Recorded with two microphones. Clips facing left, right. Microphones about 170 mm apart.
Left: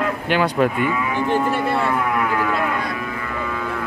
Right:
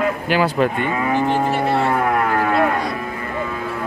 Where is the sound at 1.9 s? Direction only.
50° right (ahead or behind).